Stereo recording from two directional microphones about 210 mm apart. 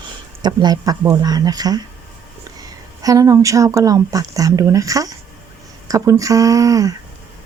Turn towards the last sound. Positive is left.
turn(degrees=-15)  # may be behind; listen again after turning